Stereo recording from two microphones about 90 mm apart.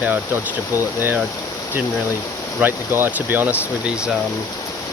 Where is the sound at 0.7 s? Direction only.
35° left (ahead or behind).